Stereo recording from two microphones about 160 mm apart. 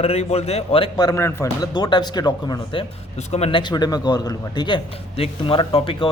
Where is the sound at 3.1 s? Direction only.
40° left (ahead or behind).